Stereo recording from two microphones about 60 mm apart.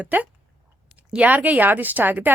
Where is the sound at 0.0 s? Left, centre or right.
Right.